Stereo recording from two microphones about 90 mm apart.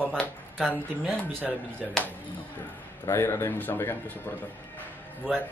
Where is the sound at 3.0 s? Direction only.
30° left (ahead or behind).